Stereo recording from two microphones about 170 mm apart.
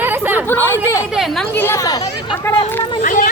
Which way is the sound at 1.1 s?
Centre (ahead or behind).